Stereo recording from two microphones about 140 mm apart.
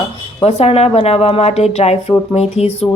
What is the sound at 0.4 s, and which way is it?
A woman's voice, 45° left (ahead or behind).